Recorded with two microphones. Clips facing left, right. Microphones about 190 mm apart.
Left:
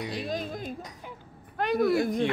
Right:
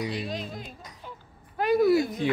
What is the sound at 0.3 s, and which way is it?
Speech, 45° left (ahead or behind).